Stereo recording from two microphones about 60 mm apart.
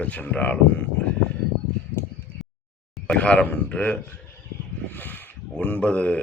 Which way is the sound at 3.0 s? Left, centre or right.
Centre.